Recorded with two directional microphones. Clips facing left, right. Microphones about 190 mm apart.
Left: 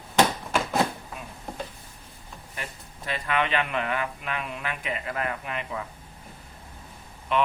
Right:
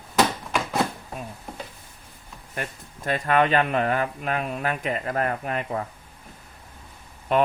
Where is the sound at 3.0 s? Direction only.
45° right (ahead or behind).